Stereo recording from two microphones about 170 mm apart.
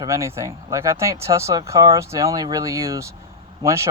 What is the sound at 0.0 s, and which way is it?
Speech, 15° right (ahead or behind).